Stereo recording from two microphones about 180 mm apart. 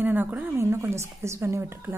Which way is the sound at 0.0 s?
10° right (ahead or behind).